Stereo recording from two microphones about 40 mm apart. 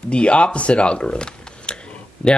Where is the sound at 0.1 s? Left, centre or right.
Left.